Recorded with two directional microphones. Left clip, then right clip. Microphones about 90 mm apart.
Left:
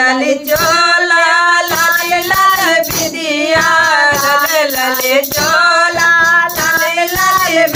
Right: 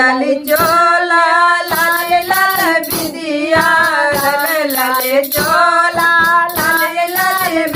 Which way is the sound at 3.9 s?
35° left (ahead or behind).